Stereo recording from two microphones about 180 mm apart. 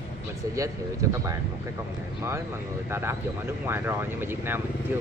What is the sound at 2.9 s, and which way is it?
Speech, 15° right (ahead or behind).